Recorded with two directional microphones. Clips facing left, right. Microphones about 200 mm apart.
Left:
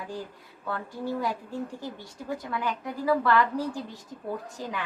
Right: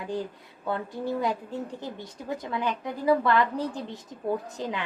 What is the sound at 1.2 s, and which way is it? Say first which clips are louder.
Speech: right 2 dB; 20° right (ahead or behind).